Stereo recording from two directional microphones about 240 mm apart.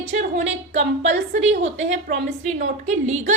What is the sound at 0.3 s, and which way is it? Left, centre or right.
A woman's voice, right.